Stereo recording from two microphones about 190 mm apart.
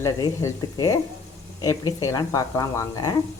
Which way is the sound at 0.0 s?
15° left (ahead or behind).